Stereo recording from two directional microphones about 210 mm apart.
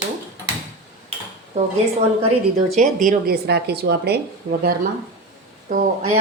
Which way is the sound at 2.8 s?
40° right (ahead or behind).